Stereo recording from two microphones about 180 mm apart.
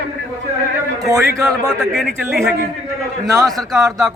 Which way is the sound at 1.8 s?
Centre (ahead or behind).